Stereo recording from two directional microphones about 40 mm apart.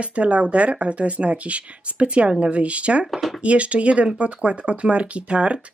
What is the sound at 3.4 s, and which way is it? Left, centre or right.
Speech, right.